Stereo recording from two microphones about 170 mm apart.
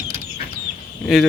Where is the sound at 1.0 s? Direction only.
Centre (ahead or behind).